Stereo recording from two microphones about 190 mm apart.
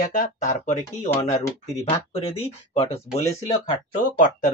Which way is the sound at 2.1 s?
30° left (ahead or behind).